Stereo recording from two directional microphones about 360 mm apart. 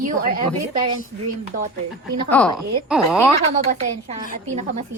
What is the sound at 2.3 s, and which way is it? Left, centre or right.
Speech, centre.